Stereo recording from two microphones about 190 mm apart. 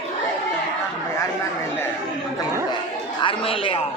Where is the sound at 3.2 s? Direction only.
25° left (ahead or behind).